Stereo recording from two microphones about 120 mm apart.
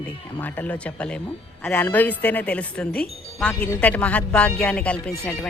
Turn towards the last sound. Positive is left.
turn(degrees=10)  # may be behind; listen again after turning